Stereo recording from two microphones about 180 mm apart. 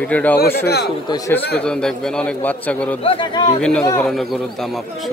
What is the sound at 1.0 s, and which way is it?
Speech, 20° left (ahead or behind).